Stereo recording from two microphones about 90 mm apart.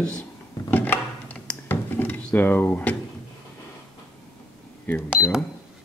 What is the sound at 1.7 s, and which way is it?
Drawer open or close, 20° left (ahead or behind).